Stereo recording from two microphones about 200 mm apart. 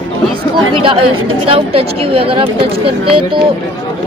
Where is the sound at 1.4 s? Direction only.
30° right (ahead or behind).